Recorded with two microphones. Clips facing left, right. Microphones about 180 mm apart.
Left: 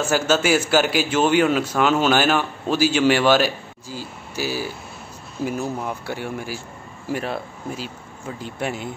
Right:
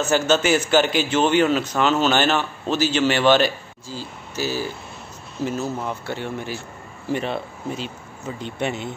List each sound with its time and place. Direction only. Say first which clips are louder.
0.0 s a man's voice: right 1 dB; 5° left (ahead or behind)